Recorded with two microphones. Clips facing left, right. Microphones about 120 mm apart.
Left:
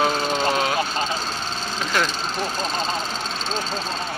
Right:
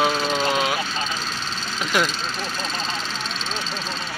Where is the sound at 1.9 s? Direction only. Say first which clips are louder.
Right 1 dB; 15° right (ahead or behind).